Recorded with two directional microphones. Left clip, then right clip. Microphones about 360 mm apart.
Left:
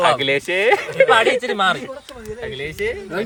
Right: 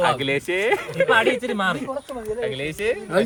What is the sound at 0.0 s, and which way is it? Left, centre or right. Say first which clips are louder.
Speech: left 4 dB; left.